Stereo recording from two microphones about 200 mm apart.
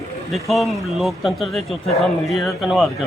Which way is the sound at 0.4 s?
Centre (ahead or behind).